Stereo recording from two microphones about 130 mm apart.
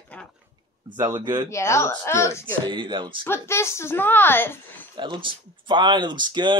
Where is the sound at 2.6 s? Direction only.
35° right (ahead or behind).